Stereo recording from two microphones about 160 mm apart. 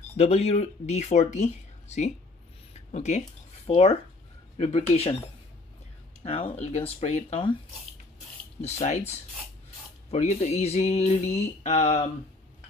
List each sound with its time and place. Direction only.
0.2 s music: 40° left (ahead or behind)
2.9 s speech: 45° left (ahead or behind)
6.2 s speech: 35° left (ahead or behind)
8.5 s music: 45° left (ahead or behind)
10.1 s music: 45° left (ahead or behind)